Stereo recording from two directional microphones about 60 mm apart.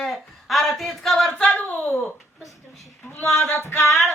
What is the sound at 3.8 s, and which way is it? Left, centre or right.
Music, left.